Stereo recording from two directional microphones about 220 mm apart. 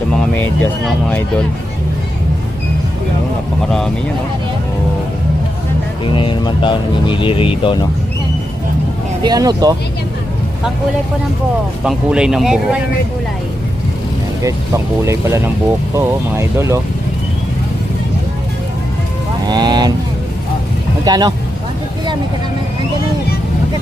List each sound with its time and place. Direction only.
0.1 s speech: 5° left (ahead or behind)
6.1 s speech: 20° left (ahead or behind)
9.2 s speech: 20° right (ahead or behind)
11.8 s speech: 5° right (ahead or behind)
14.4 s speech: 15° right (ahead or behind)
19.5 s speech: 20° right (ahead or behind)
21.0 s speech: 20° right (ahead or behind)